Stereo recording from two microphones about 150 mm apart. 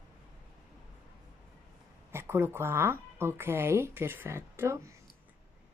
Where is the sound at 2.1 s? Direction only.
15° right (ahead or behind).